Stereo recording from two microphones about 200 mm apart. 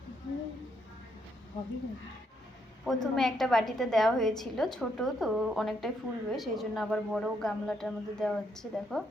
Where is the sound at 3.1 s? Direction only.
Centre (ahead or behind).